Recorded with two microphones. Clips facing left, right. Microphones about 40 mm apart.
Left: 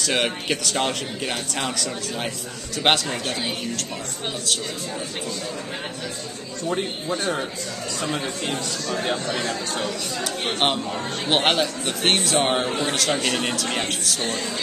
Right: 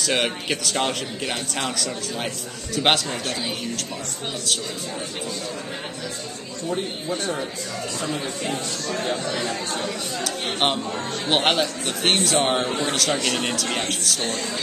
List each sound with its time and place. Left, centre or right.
0.0 s a man's voice: centre
6.7 s speech: left
9.5 s speech: left
10.2 s a man's voice: centre